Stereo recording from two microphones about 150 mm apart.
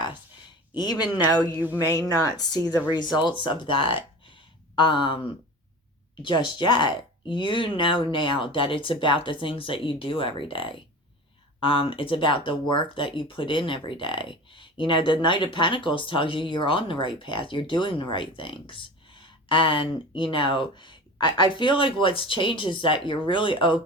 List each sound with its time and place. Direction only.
0.7 s a woman's voice: 30° left (ahead or behind)
1.5 s speech: 15° right (ahead or behind)
1.9 s a woman's voice: 25° left (ahead or behind)
6.2 s speech: 30° left (ahead or behind)